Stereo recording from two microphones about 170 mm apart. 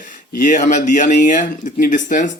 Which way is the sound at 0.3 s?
45° left (ahead or behind).